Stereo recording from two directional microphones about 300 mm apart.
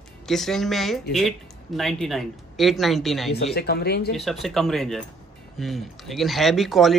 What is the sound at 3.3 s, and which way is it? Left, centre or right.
Speech, left.